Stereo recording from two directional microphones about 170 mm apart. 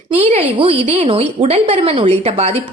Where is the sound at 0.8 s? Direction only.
35° right (ahead or behind).